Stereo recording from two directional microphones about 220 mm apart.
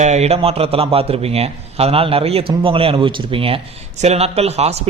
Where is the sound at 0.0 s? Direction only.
30° right (ahead or behind).